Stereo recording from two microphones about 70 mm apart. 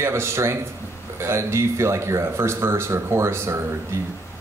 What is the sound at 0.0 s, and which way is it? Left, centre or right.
Speech, right.